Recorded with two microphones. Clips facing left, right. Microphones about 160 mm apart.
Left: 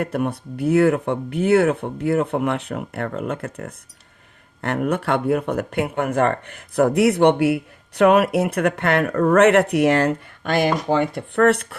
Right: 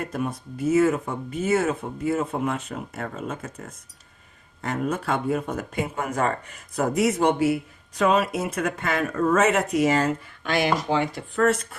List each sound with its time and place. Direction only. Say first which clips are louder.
0.0 s speech: left 5 dB; 65° left (ahead or behind)